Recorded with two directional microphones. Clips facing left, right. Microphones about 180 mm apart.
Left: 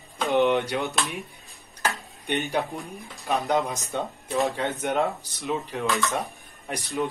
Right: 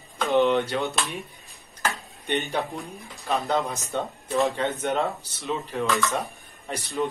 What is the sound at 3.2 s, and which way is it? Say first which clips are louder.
Speech: left 1 dB; 15° left (ahead or behind).